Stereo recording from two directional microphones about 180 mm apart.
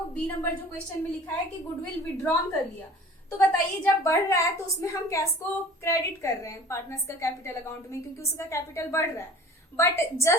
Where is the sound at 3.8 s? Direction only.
15° left (ahead or behind).